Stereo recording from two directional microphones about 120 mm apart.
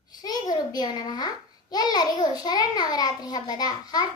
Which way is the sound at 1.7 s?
35° left (ahead or behind).